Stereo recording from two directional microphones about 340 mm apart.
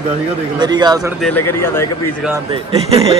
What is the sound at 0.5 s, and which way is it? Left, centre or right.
Speech, centre.